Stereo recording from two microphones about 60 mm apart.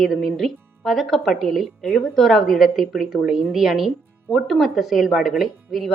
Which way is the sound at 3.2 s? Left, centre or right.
Centre.